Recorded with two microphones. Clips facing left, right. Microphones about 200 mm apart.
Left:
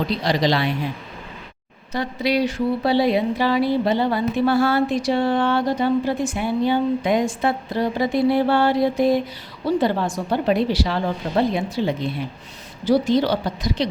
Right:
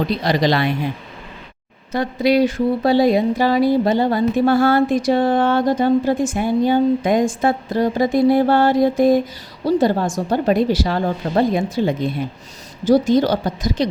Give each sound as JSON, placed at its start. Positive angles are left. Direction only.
{"t": 0.3, "sound": "speech", "side_deg": -50}
{"t": 1.9, "sound": "speech", "side_deg": -50}